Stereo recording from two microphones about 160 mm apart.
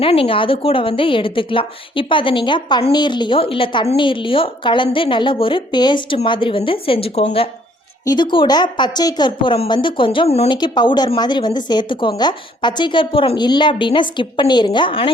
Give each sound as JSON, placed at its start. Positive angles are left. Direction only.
{"t": 0.0, "sound": "a woman's voice", "side_deg": 35}
{"t": 10.5, "sound": "a woman's voice", "side_deg": 30}